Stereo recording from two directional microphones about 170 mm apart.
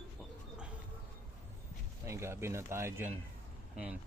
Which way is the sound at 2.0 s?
15° right (ahead or behind).